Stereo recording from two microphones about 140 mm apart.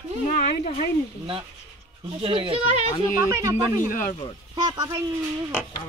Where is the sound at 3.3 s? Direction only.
20° right (ahead or behind).